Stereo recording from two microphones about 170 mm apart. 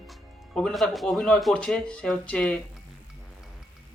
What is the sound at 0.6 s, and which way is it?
Speech, centre (ahead or behind).